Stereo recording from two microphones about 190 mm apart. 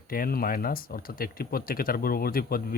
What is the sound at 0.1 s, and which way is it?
Speech, 50° left (ahead or behind).